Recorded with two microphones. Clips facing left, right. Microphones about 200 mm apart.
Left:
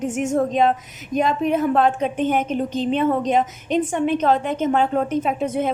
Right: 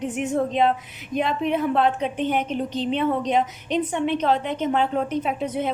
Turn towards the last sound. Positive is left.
turn(degrees=50)  # may be behind; listen again after turning